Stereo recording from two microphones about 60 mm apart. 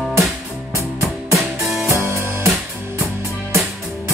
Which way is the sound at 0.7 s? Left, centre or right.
Right.